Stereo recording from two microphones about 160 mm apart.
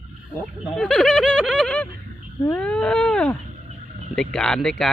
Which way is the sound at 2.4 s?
5° left (ahead or behind).